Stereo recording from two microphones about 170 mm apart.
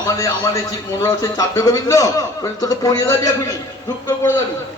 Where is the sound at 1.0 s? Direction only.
20° left (ahead or behind).